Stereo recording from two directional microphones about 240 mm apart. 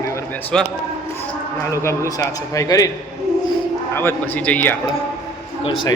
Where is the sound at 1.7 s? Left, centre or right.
Centre.